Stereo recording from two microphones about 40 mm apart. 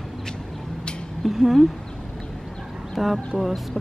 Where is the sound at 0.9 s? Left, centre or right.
Left.